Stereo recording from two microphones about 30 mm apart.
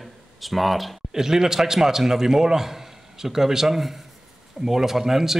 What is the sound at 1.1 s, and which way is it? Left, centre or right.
Speech, centre.